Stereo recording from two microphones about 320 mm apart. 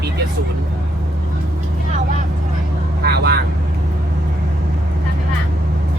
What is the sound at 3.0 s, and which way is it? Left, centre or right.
Speech, right.